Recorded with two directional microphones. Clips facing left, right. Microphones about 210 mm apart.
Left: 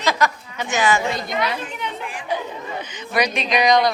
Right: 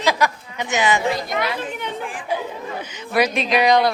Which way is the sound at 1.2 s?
50° right (ahead or behind).